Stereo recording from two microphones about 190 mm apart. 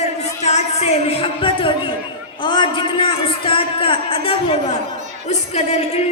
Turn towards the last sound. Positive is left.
turn(degrees=35)  # may be behind; listen again after turning